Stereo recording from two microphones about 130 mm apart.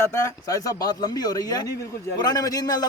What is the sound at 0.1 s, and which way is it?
A man's voice, 20° left (ahead or behind).